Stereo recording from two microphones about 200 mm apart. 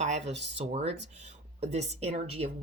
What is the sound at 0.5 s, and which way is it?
Speech, 30° right (ahead or behind).